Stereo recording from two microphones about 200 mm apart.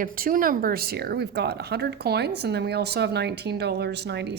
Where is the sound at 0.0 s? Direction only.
45° right (ahead or behind).